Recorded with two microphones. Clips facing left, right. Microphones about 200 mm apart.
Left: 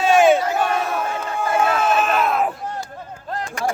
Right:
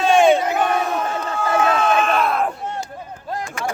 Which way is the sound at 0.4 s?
15° right (ahead or behind).